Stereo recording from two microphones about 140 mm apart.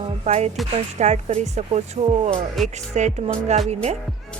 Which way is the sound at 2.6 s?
Centre (ahead or behind).